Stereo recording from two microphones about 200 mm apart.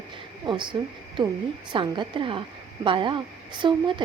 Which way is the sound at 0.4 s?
25° right (ahead or behind).